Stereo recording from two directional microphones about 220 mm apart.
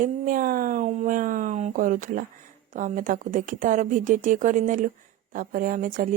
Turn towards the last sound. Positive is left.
turn(degrees=-35)  # may be behind; listen again after turning